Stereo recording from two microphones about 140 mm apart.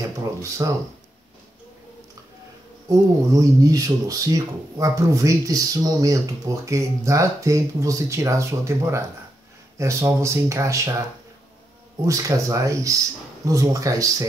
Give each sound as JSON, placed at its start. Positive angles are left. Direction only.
{"t": 0.0, "sound": "speech", "side_deg": -25}
{"t": 2.9, "sound": "speech", "side_deg": -25}
{"t": 12.1, "sound": "speech", "side_deg": -25}